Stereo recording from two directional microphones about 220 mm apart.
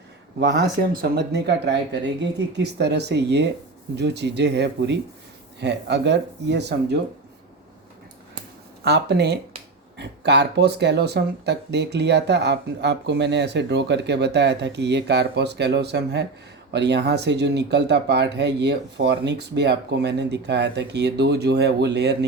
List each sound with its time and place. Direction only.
0.3 s speech: 55° right (ahead or behind)
8.8 s speech: 50° right (ahead or behind)